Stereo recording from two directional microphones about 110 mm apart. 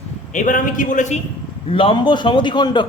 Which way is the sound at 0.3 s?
90° left.